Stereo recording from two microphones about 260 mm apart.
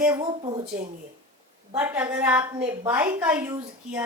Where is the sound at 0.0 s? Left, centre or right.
Centre.